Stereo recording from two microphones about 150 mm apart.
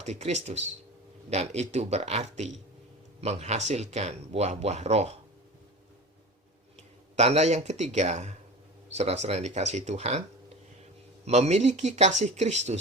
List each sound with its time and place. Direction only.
0.0 s speech: 50° right (ahead or behind)
6.7 s speech: 50° right (ahead or behind)
11.3 s speech: 50° right (ahead or behind)